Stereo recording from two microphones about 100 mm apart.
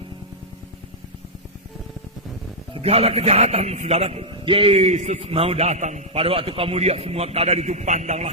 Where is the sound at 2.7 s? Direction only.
90° right.